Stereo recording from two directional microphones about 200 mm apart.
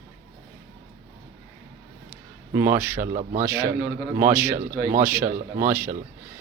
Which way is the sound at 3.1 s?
40° right (ahead or behind).